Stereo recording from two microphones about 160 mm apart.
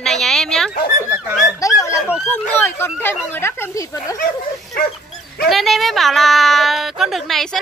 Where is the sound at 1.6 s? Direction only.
20° left (ahead or behind).